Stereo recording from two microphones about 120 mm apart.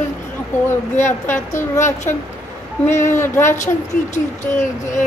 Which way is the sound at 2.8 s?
20° left (ahead or behind).